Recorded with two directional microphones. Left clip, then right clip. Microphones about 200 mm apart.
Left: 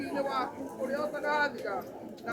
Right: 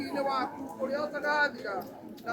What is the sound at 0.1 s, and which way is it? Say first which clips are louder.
Speech: right 2 dB; 10° right (ahead or behind).